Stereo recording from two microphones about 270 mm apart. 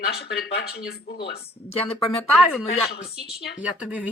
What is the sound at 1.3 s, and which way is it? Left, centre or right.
Speech, left.